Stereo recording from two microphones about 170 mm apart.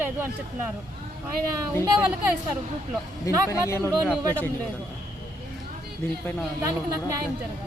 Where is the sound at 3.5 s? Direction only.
15° left (ahead or behind).